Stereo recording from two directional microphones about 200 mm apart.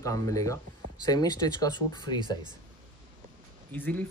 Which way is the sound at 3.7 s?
10° left (ahead or behind).